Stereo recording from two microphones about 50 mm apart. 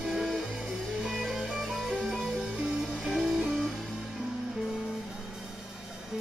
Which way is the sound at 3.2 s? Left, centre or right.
Centre.